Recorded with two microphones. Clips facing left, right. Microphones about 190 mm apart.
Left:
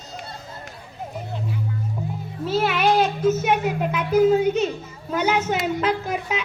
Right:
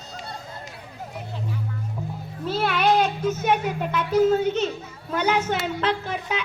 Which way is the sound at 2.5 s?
5° left (ahead or behind).